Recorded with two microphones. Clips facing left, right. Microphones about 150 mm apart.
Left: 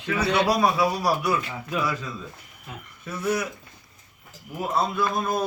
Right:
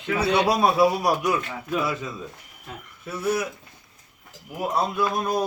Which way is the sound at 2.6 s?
5° right (ahead or behind).